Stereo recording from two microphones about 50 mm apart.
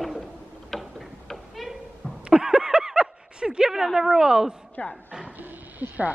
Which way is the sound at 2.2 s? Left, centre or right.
Centre.